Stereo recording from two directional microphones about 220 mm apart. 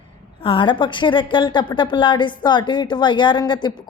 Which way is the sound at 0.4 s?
25° left (ahead or behind).